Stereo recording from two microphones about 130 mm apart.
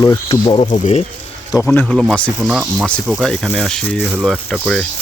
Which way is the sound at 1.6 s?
10° left (ahead or behind).